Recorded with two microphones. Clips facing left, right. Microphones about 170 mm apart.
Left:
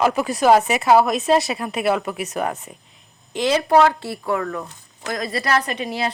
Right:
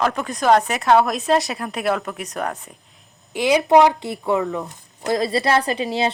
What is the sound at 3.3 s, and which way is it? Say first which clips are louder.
Speech: right 2 dB; 10° right (ahead or behind).